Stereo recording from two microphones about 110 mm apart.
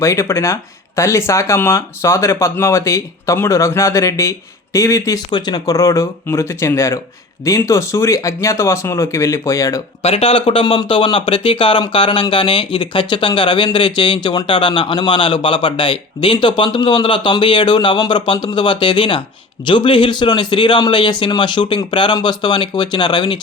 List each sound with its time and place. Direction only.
0.0 s speech: 25° left (ahead or behind)
5.3 s speech: 40° left (ahead or behind)
10.0 s a man's voice: 60° left (ahead or behind); by 23.4 s 45° left (ahead or behind)